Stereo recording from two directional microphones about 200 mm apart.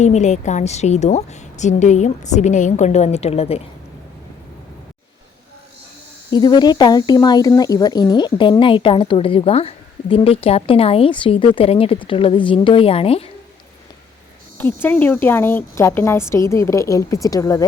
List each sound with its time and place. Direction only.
0.0 s a woman's voice: 35° left (ahead or behind)
6.3 s speech: 20° left (ahead or behind)
14.6 s a woman's voice: 10° left (ahead or behind)